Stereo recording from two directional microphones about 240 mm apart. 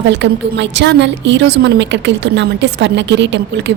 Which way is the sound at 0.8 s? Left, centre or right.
Right.